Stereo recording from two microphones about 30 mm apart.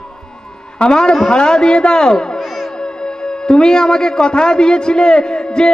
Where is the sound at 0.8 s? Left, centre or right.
Left.